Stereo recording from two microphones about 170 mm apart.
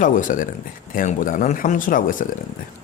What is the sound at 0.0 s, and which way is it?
A man's voice, 50° left (ahead or behind).